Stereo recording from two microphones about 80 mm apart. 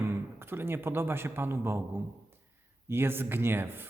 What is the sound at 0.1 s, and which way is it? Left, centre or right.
A man's voice, right.